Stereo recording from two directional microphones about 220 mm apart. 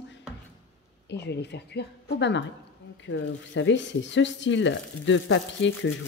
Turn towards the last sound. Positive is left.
turn(degrees=55)  # may be behind; listen again after turning